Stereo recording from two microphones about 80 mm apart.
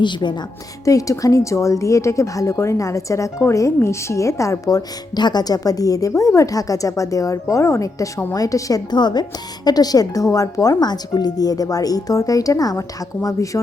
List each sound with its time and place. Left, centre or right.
0.0 s a woman's voice: left
0.9 s a woman's voice: left
8.9 s a woman's voice: left